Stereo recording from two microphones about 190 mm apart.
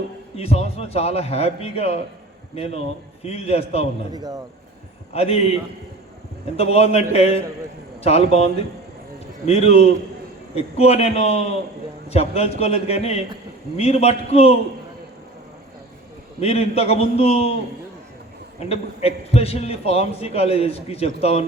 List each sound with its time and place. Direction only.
0.3 s a man's voice: 35° left (ahead or behind)
4.1 s speech: 20° right (ahead or behind)
5.1 s a man's voice: 30° left (ahead or behind)
6.6 s a man's voice: 30° left (ahead or behind)
9.5 s a man's voice: 35° left (ahead or behind)
16.4 s a man's voice: 35° left (ahead or behind)
18.6 s a man's voice: 35° left (ahead or behind)